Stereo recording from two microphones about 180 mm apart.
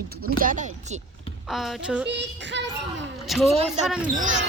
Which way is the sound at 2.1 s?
80° right.